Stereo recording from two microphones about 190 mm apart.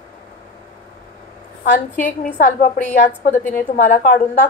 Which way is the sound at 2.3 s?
45° left (ahead or behind).